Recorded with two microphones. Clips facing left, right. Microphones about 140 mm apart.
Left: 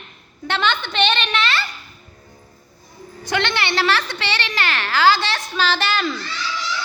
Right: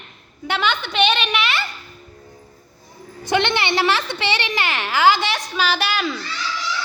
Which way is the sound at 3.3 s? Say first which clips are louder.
Right 2 dB; 20° right (ahead or behind).